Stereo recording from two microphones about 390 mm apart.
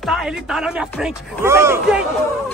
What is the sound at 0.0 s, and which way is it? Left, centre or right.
Speech, centre.